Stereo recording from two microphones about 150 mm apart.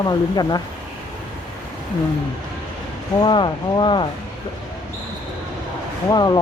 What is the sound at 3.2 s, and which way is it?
Speech, 30° left (ahead or behind).